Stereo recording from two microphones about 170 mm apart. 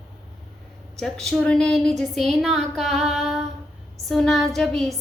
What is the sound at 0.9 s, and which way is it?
A woman's voice, 5° left (ahead or behind).